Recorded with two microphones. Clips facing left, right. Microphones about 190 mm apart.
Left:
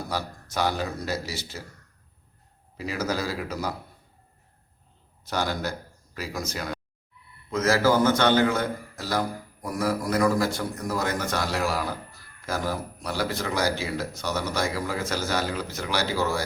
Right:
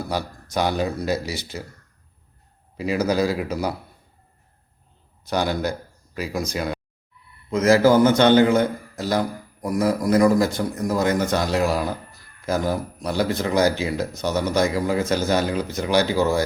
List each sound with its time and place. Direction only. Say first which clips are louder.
0.1 s a man's voice: right 5 dB; 15° right (ahead or behind)
2.7 s a man's voice: right 7 dB; 15° right (ahead or behind)
5.2 s a man's voice: right 5 dB; 15° right (ahead or behind)